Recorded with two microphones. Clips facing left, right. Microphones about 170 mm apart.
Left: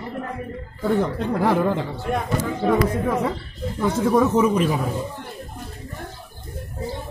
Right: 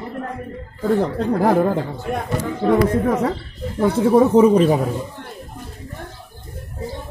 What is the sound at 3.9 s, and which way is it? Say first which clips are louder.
Speech: right 4 dB; 30° right (ahead or behind).